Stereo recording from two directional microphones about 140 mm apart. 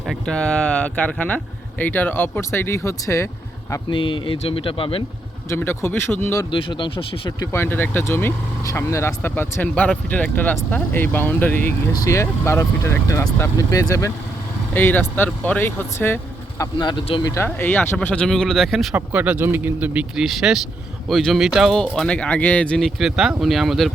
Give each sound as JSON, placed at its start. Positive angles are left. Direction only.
{"t": 0.3, "sound": "speech", "side_deg": 5}
{"t": 3.8, "sound": "speech", "side_deg": 35}
{"t": 5.5, "sound": "speech", "side_deg": 15}
{"t": 6.5, "sound": "speech", "side_deg": 35}
{"t": 7.5, "sound": "speech", "side_deg": 15}
{"t": 14.7, "sound": "speech", "side_deg": 15}
{"t": 16.7, "sound": "speech", "side_deg": 30}
{"t": 17.3, "sound": "speech", "side_deg": 15}
{"t": 18.9, "sound": "speech", "side_deg": -10}
{"t": 23.0, "sound": "speech", "side_deg": -5}